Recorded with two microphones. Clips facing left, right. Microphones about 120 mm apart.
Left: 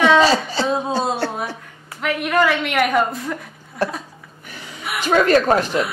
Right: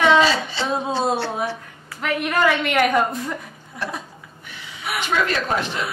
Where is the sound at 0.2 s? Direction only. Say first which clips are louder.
Left 3 dB; 40° left (ahead or behind).